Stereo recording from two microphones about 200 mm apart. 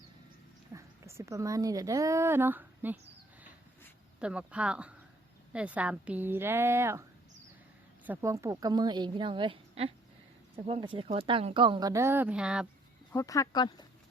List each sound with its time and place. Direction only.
0.7 s a woman's voice: 15° right (ahead or behind)
4.2 s a woman's voice: 5° right (ahead or behind)
8.0 s speech: 10° right (ahead or behind)
13.1 s speech: 15° left (ahead or behind)